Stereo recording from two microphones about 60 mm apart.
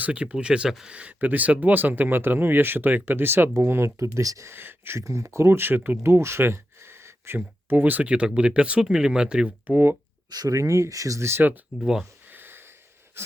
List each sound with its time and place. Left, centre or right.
0.0 s speech: right
0.9 s speech: right
3.9 s speech: right
4.4 s speech: right
4.9 s speech: right
6.1 s a sound: right
7.3 s speech: right
8.1 s speech: centre
9.6 s speech: right
10.2 s speech: right
11.2 s speech: right
11.8 s speech: centre
12.3 s a sound: right